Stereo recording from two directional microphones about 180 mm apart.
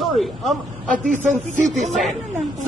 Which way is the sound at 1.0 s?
45° right (ahead or behind).